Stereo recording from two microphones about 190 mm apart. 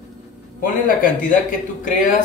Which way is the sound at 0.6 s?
45° left (ahead or behind).